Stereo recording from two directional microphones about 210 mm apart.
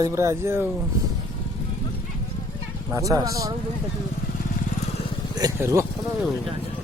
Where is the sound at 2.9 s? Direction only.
15° right (ahead or behind).